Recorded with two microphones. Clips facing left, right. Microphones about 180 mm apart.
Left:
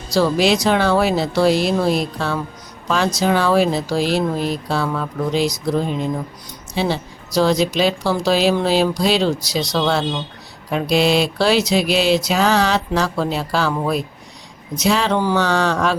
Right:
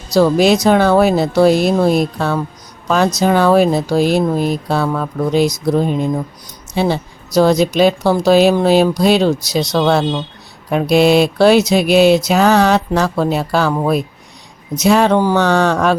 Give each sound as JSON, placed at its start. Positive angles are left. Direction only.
{"t": 0.2, "sound": "mantra", "side_deg": -50}
{"t": 2.8, "sound": "speech", "side_deg": -45}
{"t": 3.2, "sound": "mantra", "side_deg": -50}
{"t": 6.7, "sound": "mantra", "side_deg": -50}